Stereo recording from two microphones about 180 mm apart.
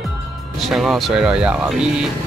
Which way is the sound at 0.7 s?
Centre (ahead or behind).